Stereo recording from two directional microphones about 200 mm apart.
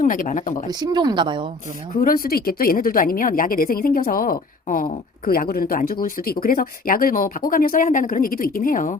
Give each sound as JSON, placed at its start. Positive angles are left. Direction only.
{"t": 0.0, "sound": "speech", "side_deg": 40}
{"t": 0.7, "sound": "speech", "side_deg": -20}
{"t": 2.0, "sound": "speech", "side_deg": 45}